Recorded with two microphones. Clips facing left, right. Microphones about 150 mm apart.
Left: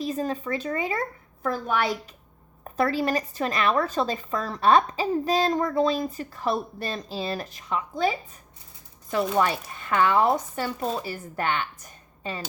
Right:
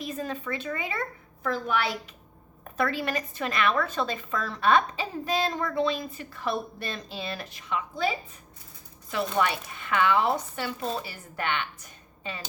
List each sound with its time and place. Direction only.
0.0 s a woman's voice: 35° left (ahead or behind)
9.4 s a woman's voice: 40° left (ahead or behind)